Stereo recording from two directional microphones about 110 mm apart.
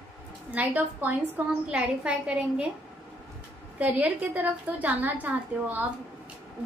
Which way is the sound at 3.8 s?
15° right (ahead or behind).